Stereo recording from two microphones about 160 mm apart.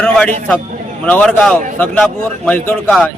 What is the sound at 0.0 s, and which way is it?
A man's voice, 5° left (ahead or behind).